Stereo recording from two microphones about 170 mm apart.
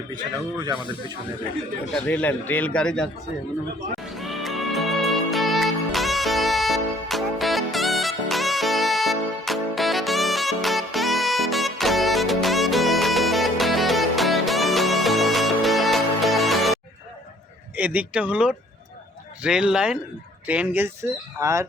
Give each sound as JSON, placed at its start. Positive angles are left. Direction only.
{"t": 2.0, "sound": "a man's voice", "side_deg": 10}
{"t": 4.2, "sound": "music", "side_deg": 0}
{"t": 17.7, "sound": "speech", "side_deg": -10}